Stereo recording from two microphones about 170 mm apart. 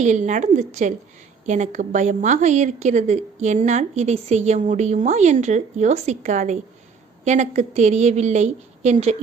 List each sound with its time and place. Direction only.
0.0 s a woman's voice: 45° right (ahead or behind)